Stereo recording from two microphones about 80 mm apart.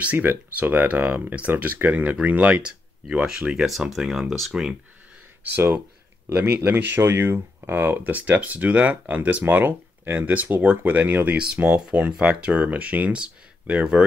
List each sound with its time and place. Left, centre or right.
0.0 s speech: centre
5.4 s speech: right